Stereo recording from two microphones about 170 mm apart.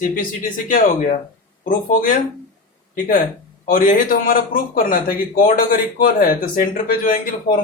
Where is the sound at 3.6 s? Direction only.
55° left (ahead or behind).